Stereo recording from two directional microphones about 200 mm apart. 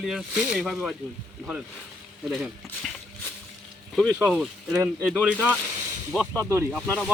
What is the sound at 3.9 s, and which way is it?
Speech, centre (ahead or behind).